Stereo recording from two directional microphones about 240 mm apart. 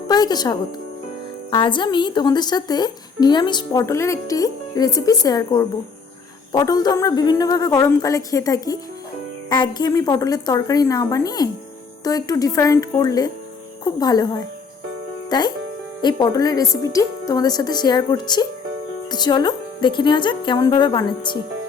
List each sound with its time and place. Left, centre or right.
0.1 s a woman's voice: centre